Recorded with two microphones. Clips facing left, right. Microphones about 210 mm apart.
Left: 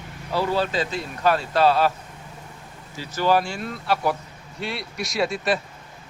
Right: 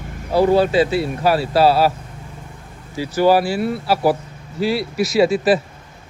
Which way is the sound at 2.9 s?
10° right (ahead or behind).